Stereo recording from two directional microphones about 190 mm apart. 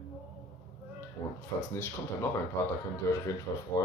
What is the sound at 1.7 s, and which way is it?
Speech, 15° left (ahead or behind).